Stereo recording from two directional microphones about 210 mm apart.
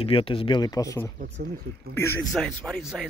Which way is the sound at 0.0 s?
25° left (ahead or behind).